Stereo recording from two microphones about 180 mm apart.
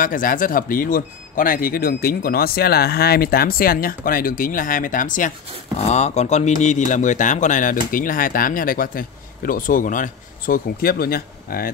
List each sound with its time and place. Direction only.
0.0 s speech: 50° left (ahead or behind)